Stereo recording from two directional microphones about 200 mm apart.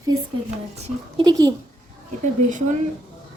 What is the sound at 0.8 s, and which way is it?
Speech, 25° right (ahead or behind).